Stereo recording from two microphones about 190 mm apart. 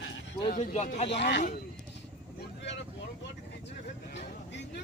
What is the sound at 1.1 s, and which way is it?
Speech, 65° left (ahead or behind).